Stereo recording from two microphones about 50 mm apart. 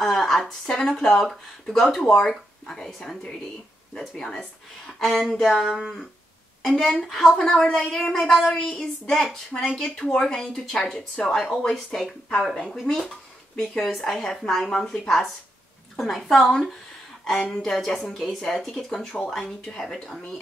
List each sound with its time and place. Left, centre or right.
0.0 s speech: centre
2.0 s a woman's voice: centre
8.2 s speech: centre
8.5 s a woman's voice: centre
11.4 s a woman's voice: centre
17.2 s a sound: centre
17.6 s speech: centre